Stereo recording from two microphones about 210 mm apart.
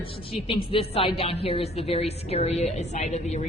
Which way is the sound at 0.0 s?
25° left (ahead or behind).